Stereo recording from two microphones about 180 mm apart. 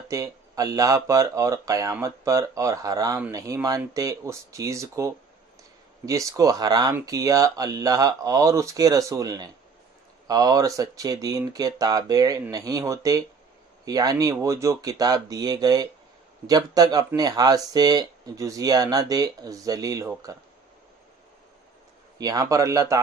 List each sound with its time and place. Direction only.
0.1 s speech: 20° right (ahead or behind)
22.2 s speech: 20° right (ahead or behind)